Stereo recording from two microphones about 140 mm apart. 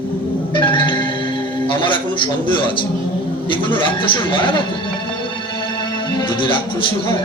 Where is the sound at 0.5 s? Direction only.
35° left (ahead or behind).